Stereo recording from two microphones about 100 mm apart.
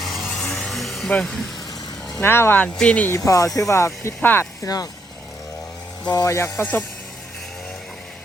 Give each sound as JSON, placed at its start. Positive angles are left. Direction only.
{"t": 0.0, "sound": "a sound", "side_deg": 0}
{"t": 0.3, "sound": "music", "side_deg": 10}
{"t": 1.1, "sound": "speech", "side_deg": 5}
{"t": 2.2, "sound": "speech", "side_deg": 25}
{"t": 3.2, "sound": "speech", "side_deg": 35}
{"t": 4.6, "sound": "speech", "side_deg": 40}
{"t": 6.1, "sound": "speech", "side_deg": 35}